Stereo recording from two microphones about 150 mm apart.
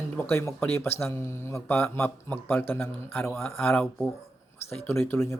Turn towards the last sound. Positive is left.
turn(degrees=20)  # may be behind; listen again after turning